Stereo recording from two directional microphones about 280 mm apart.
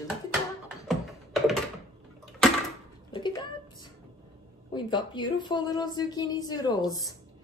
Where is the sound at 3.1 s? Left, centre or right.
Centre.